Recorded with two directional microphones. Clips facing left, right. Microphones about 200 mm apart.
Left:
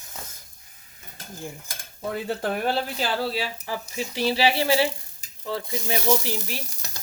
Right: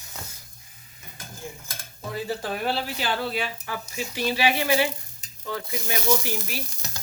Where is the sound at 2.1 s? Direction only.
55° left (ahead or behind).